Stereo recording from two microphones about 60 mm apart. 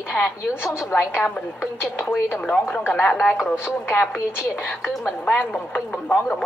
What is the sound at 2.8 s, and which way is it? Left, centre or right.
Speech, centre.